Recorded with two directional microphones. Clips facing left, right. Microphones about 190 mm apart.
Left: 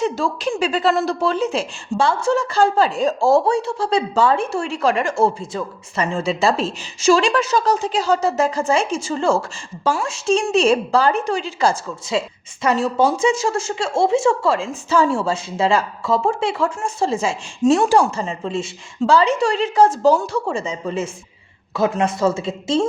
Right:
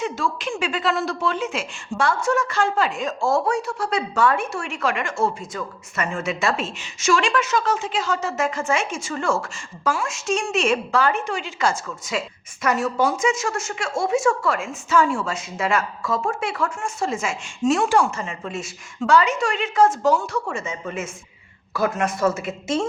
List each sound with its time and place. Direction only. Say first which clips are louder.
0.0 s speech: left 5 dB; 35° left (ahead or behind)